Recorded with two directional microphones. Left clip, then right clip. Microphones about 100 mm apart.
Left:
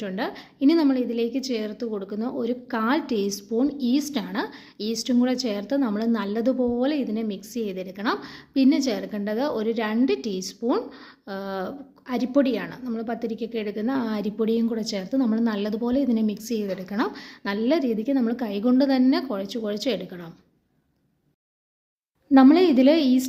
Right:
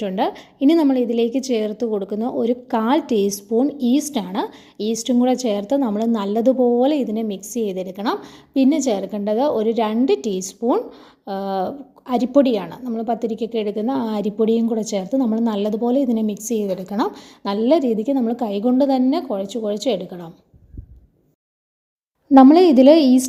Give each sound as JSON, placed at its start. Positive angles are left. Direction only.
{"t": 0.0, "sound": "a woman's voice", "side_deg": -55}
{"t": 10.7, "sound": "a woman's voice", "side_deg": -30}
{"t": 12.8, "sound": "a woman's voice", "side_deg": -25}
{"t": 13.1, "sound": "a woman's voice", "side_deg": -40}
{"t": 22.5, "sound": "a woman's voice", "side_deg": -55}